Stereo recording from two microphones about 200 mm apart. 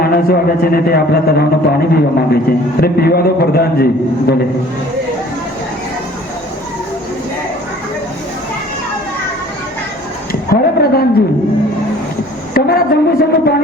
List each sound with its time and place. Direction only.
0.0 s a man's voice: 50° left (ahead or behind)
10.5 s a woman's voice: 50° left (ahead or behind)
12.5 s a man's voice: 50° left (ahead or behind)